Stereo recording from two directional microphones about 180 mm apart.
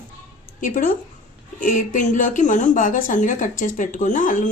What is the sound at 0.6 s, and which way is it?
Speech, 50° left (ahead or behind).